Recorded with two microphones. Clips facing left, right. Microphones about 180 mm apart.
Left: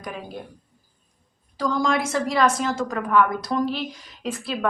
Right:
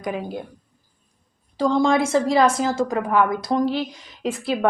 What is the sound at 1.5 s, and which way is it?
A woman's voice, 25° right (ahead or behind).